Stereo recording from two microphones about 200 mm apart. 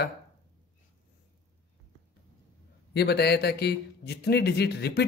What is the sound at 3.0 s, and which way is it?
A man's voice, 55° left (ahead or behind).